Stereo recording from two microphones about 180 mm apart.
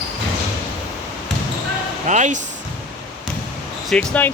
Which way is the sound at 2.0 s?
40° right (ahead or behind).